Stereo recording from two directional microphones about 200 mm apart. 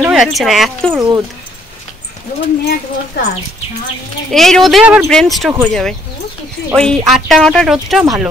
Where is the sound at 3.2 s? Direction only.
55° left (ahead or behind).